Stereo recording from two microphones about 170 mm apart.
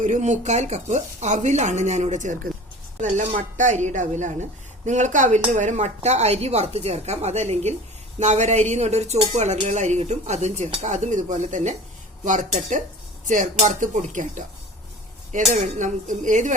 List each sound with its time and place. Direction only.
0.0 s a woman's voice: 45° right (ahead or behind)